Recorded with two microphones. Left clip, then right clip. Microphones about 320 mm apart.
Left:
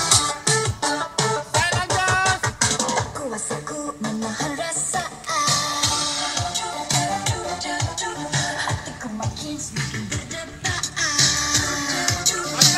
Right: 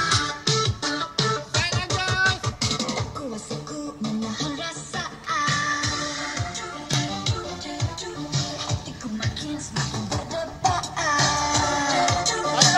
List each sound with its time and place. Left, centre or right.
0.0 s music: centre
6.9 s music: centre
10.3 s music: centre